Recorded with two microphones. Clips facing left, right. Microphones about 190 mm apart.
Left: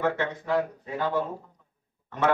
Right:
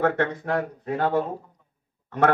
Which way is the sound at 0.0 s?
60° right (ahead or behind).